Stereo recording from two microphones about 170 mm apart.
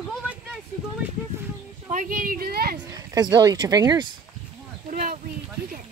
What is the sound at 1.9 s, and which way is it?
Speech, 50° right (ahead or behind).